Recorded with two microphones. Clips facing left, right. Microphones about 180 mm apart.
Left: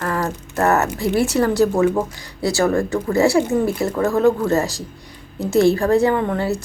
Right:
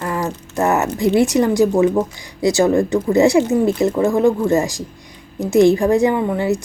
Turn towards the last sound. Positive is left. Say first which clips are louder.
# right 2 dB
turn(degrees=-15)  # may be behind; listen again after turning